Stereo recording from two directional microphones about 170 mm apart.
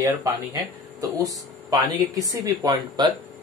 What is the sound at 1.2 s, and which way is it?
Speech, 20° right (ahead or behind).